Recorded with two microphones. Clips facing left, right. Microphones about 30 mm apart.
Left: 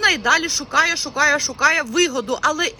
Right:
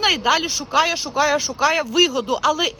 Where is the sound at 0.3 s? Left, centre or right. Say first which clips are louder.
Left 1 dB; right.